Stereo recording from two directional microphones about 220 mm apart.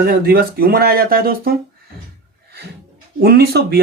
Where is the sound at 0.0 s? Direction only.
45° right (ahead or behind).